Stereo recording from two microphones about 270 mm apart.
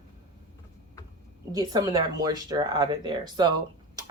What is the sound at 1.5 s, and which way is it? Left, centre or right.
Speech, centre.